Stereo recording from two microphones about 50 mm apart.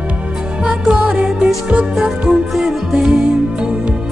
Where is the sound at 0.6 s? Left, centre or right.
Centre.